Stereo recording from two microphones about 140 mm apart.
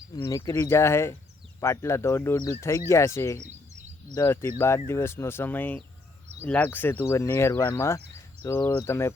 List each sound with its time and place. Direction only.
0.2 s speech: 25° left (ahead or behind)